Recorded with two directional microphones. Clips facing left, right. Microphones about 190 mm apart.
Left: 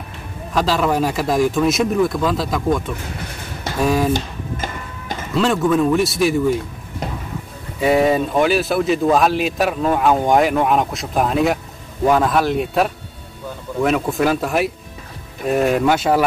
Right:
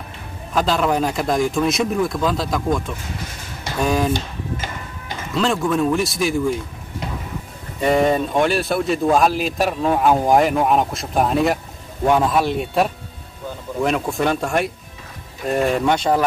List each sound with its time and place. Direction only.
0.5 s a man's voice: centre (ahead or behind)
3.8 s speech: centre (ahead or behind)
4.1 s music: 45° left (ahead or behind)
5.3 s a man's voice: centre (ahead or behind)
7.8 s a man's voice: 5° left (ahead or behind)